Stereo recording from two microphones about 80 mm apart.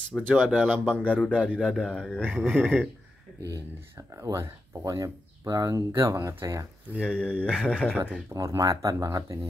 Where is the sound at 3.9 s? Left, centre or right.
Right.